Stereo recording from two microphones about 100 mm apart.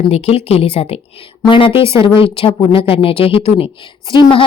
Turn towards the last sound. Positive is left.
turn(degrees=55)  # may be behind; listen again after turning